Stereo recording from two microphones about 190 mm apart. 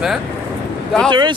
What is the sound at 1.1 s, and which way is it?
Speech, 25° right (ahead or behind).